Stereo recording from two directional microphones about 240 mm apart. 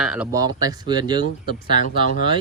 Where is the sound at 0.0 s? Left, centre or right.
Centre.